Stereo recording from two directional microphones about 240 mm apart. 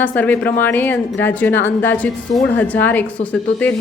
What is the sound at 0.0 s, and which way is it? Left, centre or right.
A woman's voice, centre.